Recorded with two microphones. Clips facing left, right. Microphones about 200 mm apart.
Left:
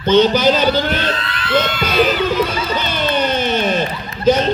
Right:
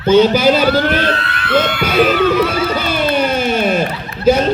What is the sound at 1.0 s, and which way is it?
Speech, 60° right (ahead or behind).